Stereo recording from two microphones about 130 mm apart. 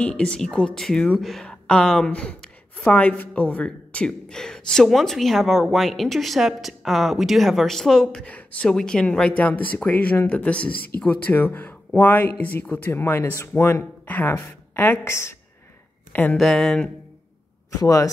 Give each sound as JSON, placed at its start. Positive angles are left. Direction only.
{"t": 0.0, "sound": "a woman's voice", "side_deg": 5}
{"t": 16.3, "sound": "a woman's voice", "side_deg": 0}
{"t": 17.7, "sound": "speech", "side_deg": 25}